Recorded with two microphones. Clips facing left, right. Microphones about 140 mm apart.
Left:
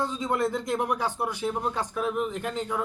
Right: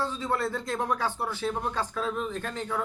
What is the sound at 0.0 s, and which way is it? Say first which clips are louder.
Speech: left 2 dB; 15° left (ahead or behind).